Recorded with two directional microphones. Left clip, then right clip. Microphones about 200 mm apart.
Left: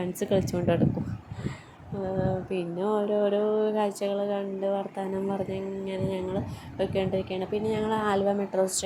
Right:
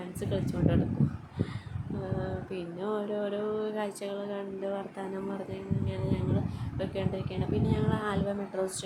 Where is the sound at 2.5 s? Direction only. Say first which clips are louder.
Left 6 dB; 20° left (ahead or behind).